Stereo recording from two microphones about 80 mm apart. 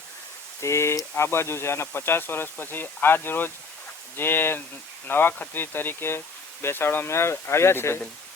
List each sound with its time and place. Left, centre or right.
0.6 s speech: left